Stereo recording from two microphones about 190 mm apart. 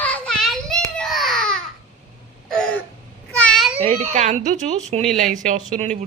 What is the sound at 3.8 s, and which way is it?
Speech, 40° right (ahead or behind).